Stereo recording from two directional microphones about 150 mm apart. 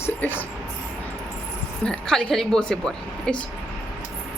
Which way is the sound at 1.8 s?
5° left (ahead or behind).